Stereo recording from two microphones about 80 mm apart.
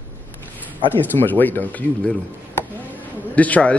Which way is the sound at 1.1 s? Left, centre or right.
Left.